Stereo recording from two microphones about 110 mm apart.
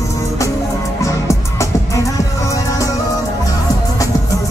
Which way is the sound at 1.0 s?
25° left (ahead or behind).